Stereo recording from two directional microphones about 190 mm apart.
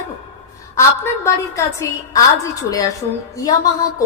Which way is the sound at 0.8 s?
15° left (ahead or behind).